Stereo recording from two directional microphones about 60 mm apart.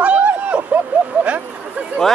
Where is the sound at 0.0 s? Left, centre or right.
Right.